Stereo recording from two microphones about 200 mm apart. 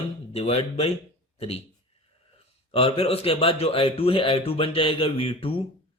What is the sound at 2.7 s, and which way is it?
Speech, 30° left (ahead or behind).